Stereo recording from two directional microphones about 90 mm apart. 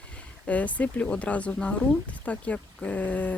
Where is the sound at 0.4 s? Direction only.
15° left (ahead or behind).